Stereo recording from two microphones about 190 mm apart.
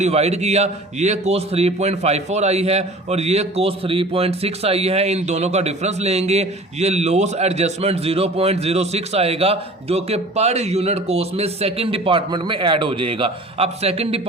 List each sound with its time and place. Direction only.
0.0 s a man's voice: 35° right (ahead or behind)